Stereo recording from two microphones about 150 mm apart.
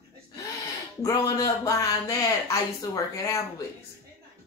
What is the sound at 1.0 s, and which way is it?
Speech, 25° left (ahead or behind).